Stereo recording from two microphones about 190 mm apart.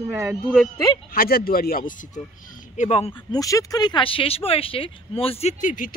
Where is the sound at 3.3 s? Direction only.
20° left (ahead or behind).